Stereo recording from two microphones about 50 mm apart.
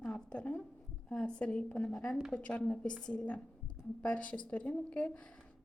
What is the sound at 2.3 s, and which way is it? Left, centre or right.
A woman's voice, left.